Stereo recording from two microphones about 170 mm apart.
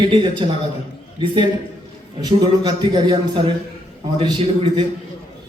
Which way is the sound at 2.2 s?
25° right (ahead or behind).